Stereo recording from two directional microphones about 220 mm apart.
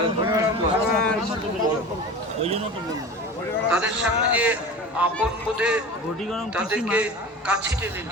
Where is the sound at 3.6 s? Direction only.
5° right (ahead or behind).